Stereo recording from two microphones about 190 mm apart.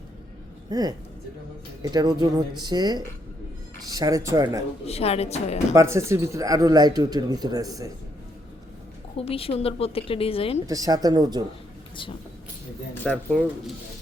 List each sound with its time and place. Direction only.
0.7 s speech: 20° right (ahead or behind)
4.9 s a woman's voice: 30° left (ahead or behind)
5.7 s speech: 15° right (ahead or behind)
9.1 s a woman's voice: 30° left (ahead or behind)
10.7 s speech: 20° right (ahead or behind)
13.0 s speech: 5° left (ahead or behind)